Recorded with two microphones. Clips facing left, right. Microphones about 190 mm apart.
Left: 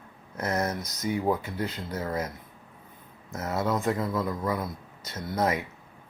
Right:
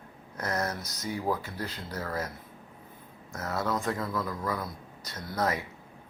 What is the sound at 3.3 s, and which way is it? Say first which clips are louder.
Speech: left 3 dB; 20° left (ahead or behind).